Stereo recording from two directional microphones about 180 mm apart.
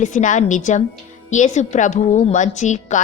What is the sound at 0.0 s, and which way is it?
A woman's voice, 45° left (ahead or behind).